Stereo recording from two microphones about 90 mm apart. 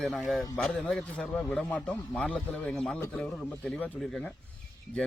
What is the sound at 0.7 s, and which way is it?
Speech, 10° left (ahead or behind).